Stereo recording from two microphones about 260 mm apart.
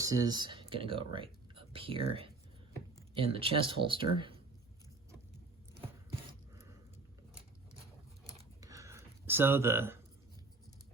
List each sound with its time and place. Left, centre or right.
0.0 s speech: centre
8.4 s computer keyboard: centre